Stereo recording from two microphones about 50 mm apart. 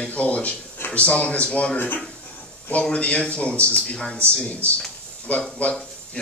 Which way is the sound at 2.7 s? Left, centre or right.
Left.